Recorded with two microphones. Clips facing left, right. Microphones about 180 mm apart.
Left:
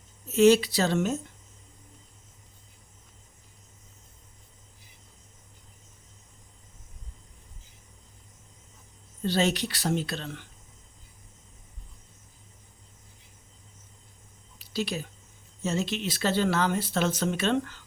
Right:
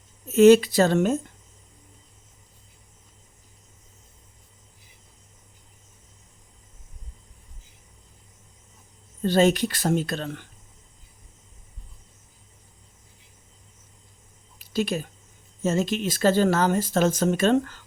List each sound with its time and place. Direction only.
0.3 s speech: 50° right (ahead or behind)
9.2 s speech: 50° right (ahead or behind)
14.6 s a sound: 50° right (ahead or behind)
15.6 s speech: 50° right (ahead or behind)